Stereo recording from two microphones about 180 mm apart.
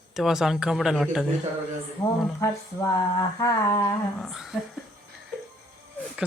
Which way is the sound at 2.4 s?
15° left (ahead or behind).